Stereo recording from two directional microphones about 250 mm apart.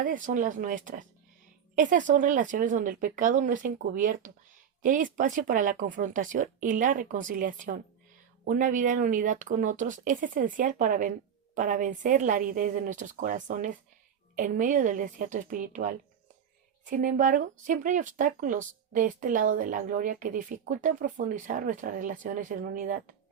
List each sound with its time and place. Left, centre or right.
0.0 s speech: right